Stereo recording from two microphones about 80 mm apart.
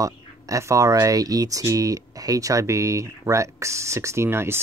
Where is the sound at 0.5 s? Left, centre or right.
Right.